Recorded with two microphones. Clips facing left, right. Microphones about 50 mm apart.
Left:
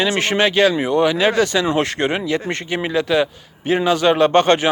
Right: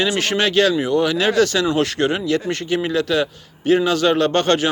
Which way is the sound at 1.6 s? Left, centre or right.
Left.